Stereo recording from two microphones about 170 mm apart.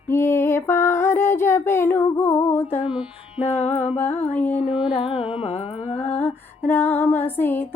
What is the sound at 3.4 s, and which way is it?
Music, 35° left (ahead or behind).